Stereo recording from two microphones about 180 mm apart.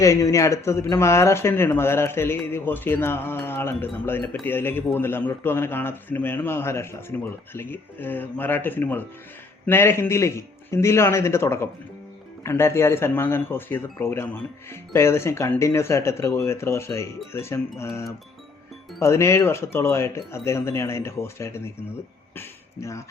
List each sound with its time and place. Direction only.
0.0 s speech: 15° left (ahead or behind)